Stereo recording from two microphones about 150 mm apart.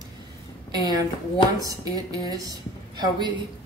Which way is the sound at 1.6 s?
25° right (ahead or behind).